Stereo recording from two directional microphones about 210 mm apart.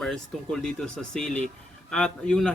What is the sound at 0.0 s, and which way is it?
Speech, centre (ahead or behind).